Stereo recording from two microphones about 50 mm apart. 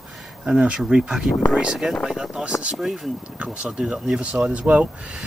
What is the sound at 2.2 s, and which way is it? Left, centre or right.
Speech, centre.